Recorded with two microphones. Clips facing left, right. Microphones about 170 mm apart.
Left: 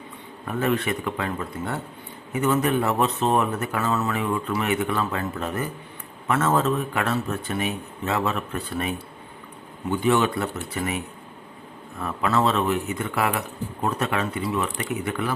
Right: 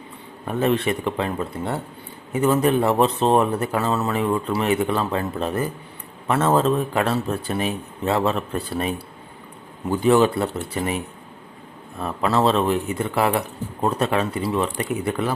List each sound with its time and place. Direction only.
0.4 s speech: 30° right (ahead or behind)
9.9 s speech: 35° right (ahead or behind)